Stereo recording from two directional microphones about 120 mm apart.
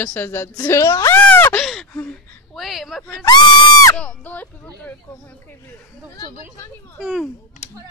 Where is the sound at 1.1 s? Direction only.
15° left (ahead or behind).